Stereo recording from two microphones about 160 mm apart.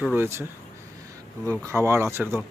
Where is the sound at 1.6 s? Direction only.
15° right (ahead or behind).